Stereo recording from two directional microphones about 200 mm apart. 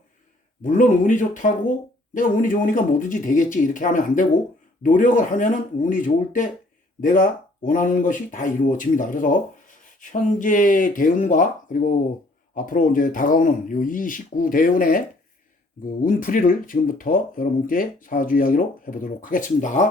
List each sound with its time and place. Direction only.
0.6 s speech: 40° left (ahead or behind)